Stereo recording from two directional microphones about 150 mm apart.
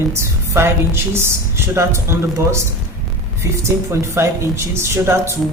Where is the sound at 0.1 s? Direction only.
15° right (ahead or behind).